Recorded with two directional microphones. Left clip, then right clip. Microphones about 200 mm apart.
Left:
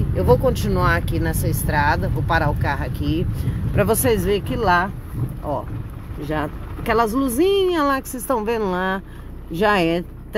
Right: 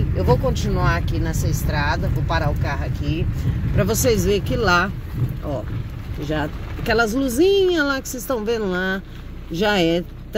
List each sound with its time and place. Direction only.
0.2 s speech: 15° left (ahead or behind)
3.7 s speech: 10° left (ahead or behind); by 4.8 s 10° right (ahead or behind)
6.2 s speech: 5° right (ahead or behind)